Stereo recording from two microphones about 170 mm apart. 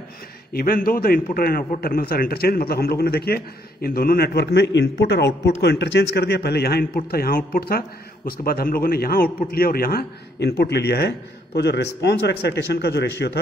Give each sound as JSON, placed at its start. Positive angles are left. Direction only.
{"t": 0.5, "sound": "a man's voice", "side_deg": 60}